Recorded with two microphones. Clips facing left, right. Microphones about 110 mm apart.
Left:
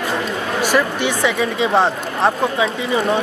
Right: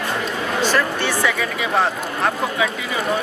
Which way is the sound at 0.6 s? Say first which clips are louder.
Left 3 dB; 15° left (ahead or behind).